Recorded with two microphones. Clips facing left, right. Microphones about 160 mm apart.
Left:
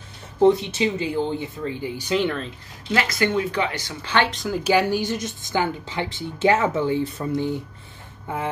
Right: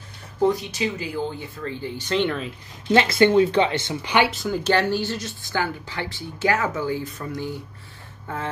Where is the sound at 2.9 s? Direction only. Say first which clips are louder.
Right 5 dB; 25° right (ahead or behind).